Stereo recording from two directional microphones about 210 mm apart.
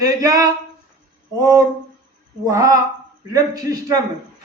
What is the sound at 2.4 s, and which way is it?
Speech, 15° right (ahead or behind).